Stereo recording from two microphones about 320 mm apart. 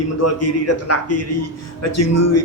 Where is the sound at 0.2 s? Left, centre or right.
Left.